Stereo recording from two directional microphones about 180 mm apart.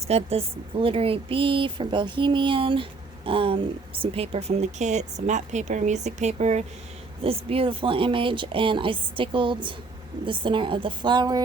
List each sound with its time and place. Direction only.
0.1 s a woman's voice: 35° right (ahead or behind)